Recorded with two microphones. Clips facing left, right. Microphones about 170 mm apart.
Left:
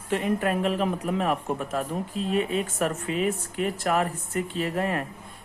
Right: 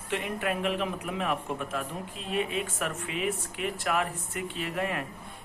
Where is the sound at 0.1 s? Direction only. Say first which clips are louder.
Left 6 dB; 40° left (ahead or behind).